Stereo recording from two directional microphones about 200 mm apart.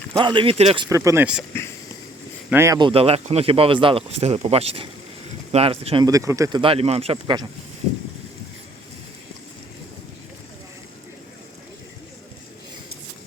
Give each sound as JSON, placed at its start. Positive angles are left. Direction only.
{"t": 0.1, "sound": "speech", "side_deg": -25}
{"t": 0.9, "sound": "speech", "side_deg": -15}
{"t": 2.5, "sound": "speech", "side_deg": -15}